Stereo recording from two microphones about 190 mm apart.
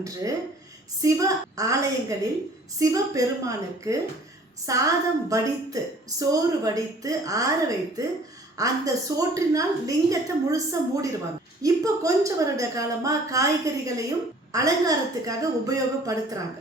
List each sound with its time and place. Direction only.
0.0 s a woman's voice: 20° right (ahead or behind)
8.5 s a woman's voice: 20° right (ahead or behind)